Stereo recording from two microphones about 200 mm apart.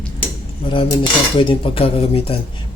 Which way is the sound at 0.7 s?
25° left (ahead or behind).